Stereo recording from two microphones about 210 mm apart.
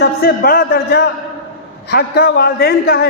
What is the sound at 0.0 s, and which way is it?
A man's voice, 50° left (ahead or behind).